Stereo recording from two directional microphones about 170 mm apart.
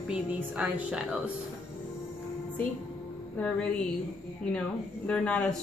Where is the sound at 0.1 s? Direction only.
5° right (ahead or behind).